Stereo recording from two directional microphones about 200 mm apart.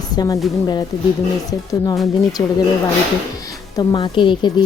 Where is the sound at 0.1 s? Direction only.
20° left (ahead or behind).